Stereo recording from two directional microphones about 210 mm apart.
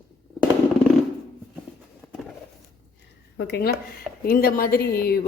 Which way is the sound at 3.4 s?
50° left (ahead or behind).